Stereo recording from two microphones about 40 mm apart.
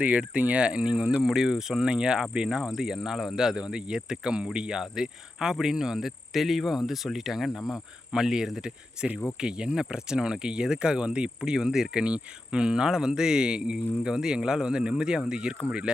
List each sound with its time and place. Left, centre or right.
0.0 s insect: right
0.6 s cricket: right
1.2 s speech: centre
2.3 s cricket: right
2.7 s speech: centre
4.5 s cricket: right
4.8 s speech: centre
9.4 s cricket: right